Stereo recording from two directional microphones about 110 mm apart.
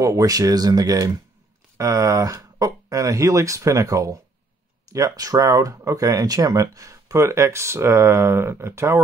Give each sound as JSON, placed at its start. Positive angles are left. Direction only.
{"t": 0.0, "sound": "speech", "side_deg": -30}